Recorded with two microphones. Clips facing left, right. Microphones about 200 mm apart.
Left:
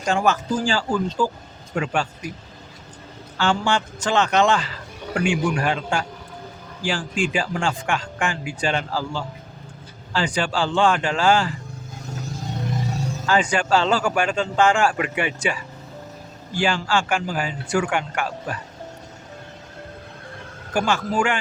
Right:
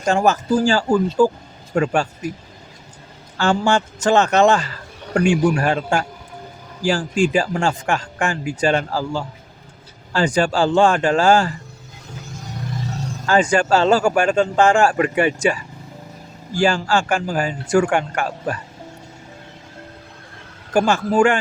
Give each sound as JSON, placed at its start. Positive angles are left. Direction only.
{"t": 0.0, "sound": "a man's voice", "side_deg": -40}
{"t": 3.3, "sound": "a man's voice", "side_deg": -45}
{"t": 13.2, "sound": "speech", "side_deg": -45}
{"t": 16.6, "sound": "speech", "side_deg": -40}
{"t": 20.7, "sound": "speech", "side_deg": -45}